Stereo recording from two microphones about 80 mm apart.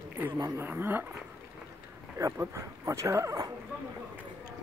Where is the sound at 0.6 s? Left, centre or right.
Right.